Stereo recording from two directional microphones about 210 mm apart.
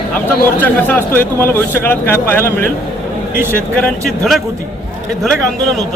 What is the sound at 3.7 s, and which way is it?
Speech, centre (ahead or behind).